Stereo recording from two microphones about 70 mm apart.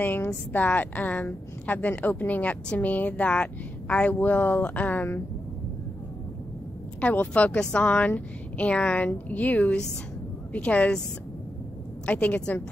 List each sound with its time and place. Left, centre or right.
0.0 s a woman's voice: left
7.0 s a woman's voice: left
12.1 s a woman's voice: left